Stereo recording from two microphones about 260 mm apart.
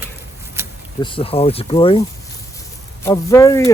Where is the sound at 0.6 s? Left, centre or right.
Centre.